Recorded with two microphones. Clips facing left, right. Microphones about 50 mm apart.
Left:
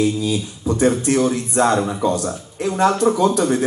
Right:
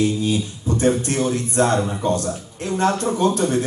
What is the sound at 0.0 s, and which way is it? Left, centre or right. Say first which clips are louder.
Speech: left 1 dB; right.